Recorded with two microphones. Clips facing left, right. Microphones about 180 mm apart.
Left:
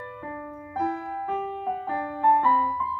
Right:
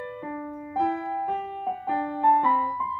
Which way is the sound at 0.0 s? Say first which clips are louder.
Right 3 dB; 15° right (ahead or behind).